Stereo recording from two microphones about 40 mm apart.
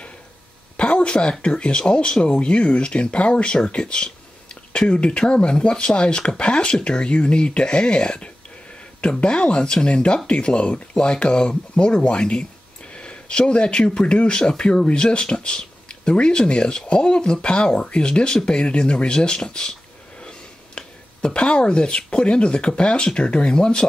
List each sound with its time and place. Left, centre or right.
0.7 s speech: left